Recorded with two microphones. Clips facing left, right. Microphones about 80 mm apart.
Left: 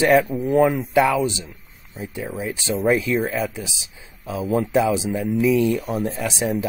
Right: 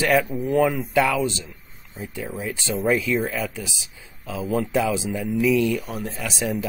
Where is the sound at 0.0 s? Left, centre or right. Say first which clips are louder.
Left 4 dB; left.